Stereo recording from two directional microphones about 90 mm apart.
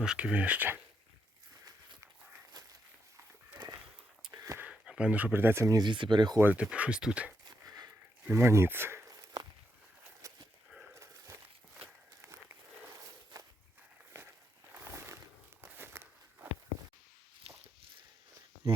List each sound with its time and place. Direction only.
0.0 s speech: 10° right (ahead or behind)
4.3 s a sound: 40° right (ahead or behind)
4.7 s speech: 10° right (ahead or behind); by 5.7 s 25° right (ahead or behind)
5.7 s speech: 60° right (ahead or behind)
6.4 s speech: 15° right (ahead or behind)
7.4 s a sound: 45° right (ahead or behind)
8.2 s speech: 30° right (ahead or behind)
9.0 s walk: 45° right (ahead or behind)
10.2 s a sound: 35° right (ahead or behind)
10.9 s dog: 35° right (ahead or behind)
14.1 s walk: 25° right (ahead or behind)
14.8 s a sound: 35° right (ahead or behind)
15.6 s walk: 25° right (ahead or behind)